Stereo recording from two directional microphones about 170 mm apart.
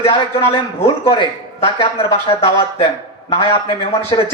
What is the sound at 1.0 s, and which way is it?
Speech, 35° left (ahead or behind).